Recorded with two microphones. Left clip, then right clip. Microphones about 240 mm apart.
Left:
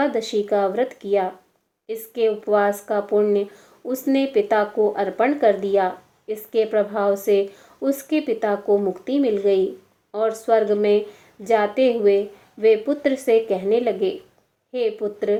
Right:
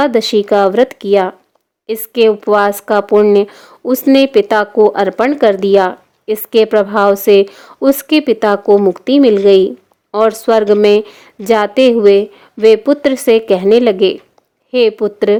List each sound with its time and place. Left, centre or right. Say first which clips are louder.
0.0 s speech: right 10 dB; right